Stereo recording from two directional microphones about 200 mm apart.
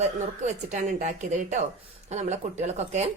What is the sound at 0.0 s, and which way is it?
Speech, 35° right (ahead or behind).